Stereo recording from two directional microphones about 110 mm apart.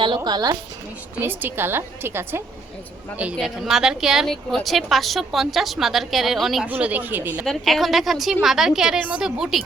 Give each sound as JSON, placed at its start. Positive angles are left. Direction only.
{"t": 0.3, "sound": "a woman's voice", "side_deg": -35}
{"t": 1.2, "sound": "a woman's voice", "side_deg": -20}
{"t": 3.3, "sound": "a woman's voice", "side_deg": -5}
{"t": 6.7, "sound": "speech", "side_deg": -15}
{"t": 7.4, "sound": "a woman's voice", "side_deg": 0}